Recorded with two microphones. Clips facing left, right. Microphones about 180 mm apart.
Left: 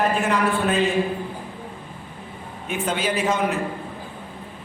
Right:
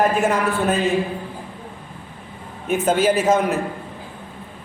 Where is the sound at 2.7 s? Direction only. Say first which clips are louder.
Right 7 dB; 45° right (ahead or behind).